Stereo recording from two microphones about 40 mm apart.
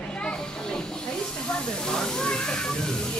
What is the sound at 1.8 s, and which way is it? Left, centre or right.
Speech, centre.